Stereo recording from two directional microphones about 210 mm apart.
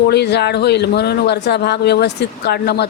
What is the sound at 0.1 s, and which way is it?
Speech, 50° left (ahead or behind).